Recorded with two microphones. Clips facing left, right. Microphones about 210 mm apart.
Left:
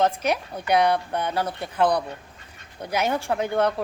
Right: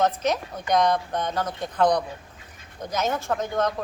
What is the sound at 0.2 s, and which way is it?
A woman's voice, 10° left (ahead or behind).